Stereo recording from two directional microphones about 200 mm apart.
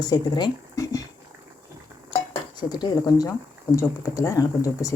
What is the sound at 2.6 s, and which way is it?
Speech, 20° left (ahead or behind).